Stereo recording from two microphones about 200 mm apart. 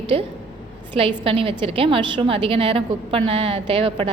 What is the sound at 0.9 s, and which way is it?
A woman's voice, 25° right (ahead or behind).